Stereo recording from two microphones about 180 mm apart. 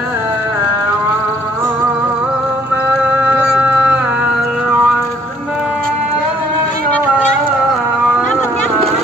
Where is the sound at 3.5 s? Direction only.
5° right (ahead or behind).